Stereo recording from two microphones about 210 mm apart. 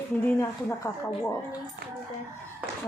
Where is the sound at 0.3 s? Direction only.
10° left (ahead or behind).